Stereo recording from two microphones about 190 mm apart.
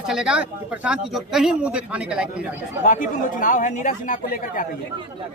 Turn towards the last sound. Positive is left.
turn(degrees=45)  # may be behind; listen again after turning